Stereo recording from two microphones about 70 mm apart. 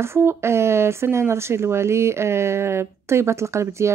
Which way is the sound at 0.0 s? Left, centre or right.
Right.